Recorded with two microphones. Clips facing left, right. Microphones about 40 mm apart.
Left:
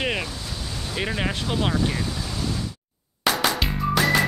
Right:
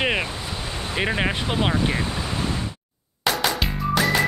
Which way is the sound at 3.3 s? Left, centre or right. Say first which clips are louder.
Even; centre.